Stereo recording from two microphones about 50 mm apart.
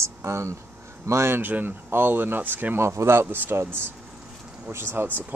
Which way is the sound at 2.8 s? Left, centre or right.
Right.